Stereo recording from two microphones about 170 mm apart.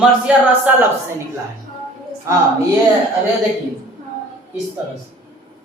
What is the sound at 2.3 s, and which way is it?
Speech, 20° right (ahead or behind).